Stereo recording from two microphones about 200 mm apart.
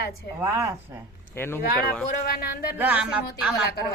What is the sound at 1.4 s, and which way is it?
Speech, 10° left (ahead or behind).